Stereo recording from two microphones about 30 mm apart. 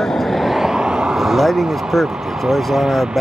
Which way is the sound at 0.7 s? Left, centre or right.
Right.